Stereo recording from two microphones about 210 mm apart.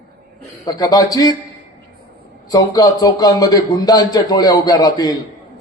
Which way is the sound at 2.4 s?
15° left (ahead or behind).